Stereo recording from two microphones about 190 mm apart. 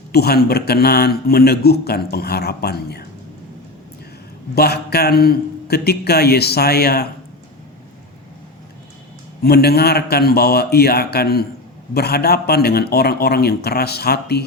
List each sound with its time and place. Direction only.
0.1 s a man's voice: 55° left (ahead or behind)
4.5 s a man's voice: 55° left (ahead or behind)
9.4 s a man's voice: 55° left (ahead or behind)